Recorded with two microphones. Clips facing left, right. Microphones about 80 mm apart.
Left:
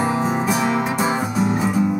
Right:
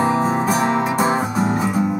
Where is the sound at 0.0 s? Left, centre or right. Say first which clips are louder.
Right 2 dB; right.